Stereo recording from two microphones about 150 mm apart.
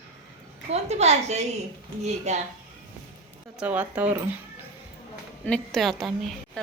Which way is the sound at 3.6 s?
10° right (ahead or behind).